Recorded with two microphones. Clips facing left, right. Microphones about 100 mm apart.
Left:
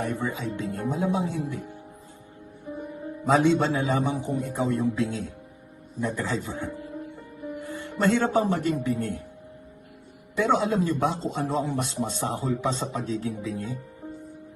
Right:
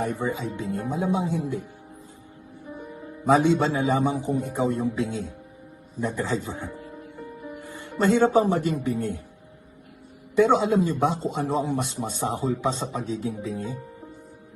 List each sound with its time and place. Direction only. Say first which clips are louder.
0.0 s speech: right 2 dB; 20° right (ahead or behind)
3.2 s speech: right 1 dB; 20° right (ahead or behind)
7.7 s speech: right 2 dB; 20° right (ahead or behind)
10.3 s speech: right 4 dB; 20° right (ahead or behind)